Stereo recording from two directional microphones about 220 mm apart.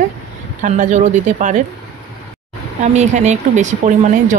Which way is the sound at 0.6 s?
35° right (ahead or behind).